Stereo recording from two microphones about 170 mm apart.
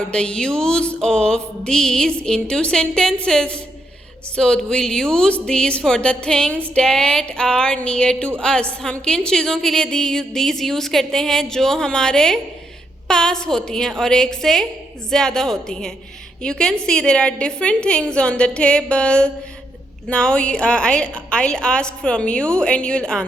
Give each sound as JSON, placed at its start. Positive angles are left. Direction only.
{"t": 0.1, "sound": "a woman's voice", "side_deg": 5}